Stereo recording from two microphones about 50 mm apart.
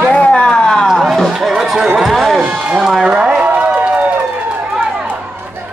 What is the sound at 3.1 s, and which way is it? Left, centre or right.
Speech, centre.